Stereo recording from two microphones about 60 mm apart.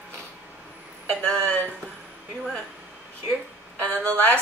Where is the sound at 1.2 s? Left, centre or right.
Centre.